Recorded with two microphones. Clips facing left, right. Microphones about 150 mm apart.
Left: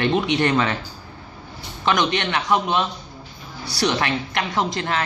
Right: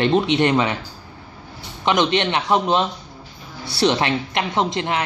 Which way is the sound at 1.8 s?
25° right (ahead or behind).